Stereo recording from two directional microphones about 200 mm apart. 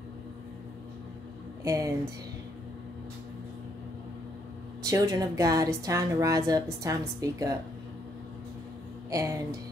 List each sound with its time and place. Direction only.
1.6 s speech: 15° right (ahead or behind)
4.8 s a woman's voice: 15° right (ahead or behind)
9.1 s a woman's voice: 15° right (ahead or behind)